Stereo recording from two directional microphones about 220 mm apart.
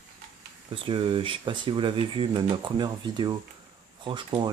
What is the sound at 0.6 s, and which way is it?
Speech, 25° right (ahead or behind).